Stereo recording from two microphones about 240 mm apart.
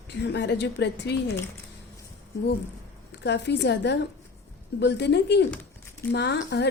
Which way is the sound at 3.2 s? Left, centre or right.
Left.